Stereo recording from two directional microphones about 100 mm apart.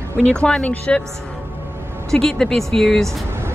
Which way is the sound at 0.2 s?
10° left (ahead or behind).